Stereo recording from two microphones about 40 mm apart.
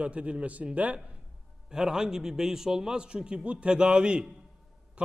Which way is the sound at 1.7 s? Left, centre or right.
Centre.